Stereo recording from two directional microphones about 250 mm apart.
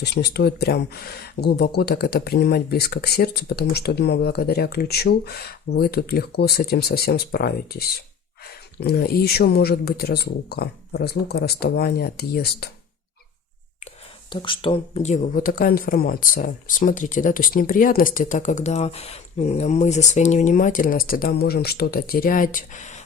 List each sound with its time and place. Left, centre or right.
0.0 s speech: left
14.3 s speech: centre